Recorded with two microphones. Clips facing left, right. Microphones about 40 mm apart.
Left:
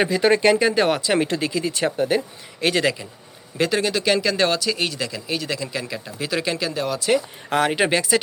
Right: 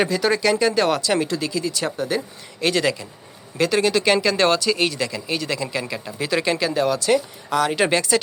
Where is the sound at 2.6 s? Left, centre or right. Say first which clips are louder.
Even; centre.